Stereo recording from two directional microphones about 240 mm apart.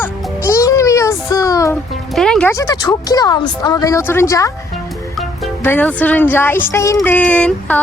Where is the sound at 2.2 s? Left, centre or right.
Centre.